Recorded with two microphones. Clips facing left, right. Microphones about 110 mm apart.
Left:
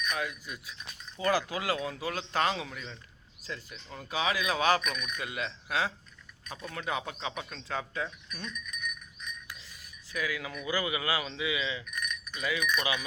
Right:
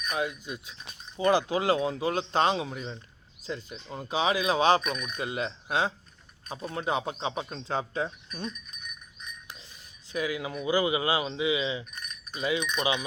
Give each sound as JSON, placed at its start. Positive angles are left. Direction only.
{"t": 0.2, "sound": "speech", "side_deg": -25}
{"t": 10.1, "sound": "speech", "side_deg": -25}